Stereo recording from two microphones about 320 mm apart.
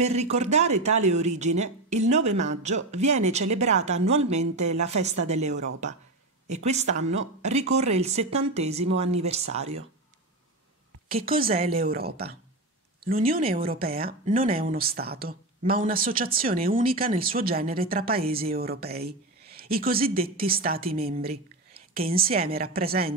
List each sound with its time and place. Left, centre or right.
0.0 s speech: centre
11.1 s speech: right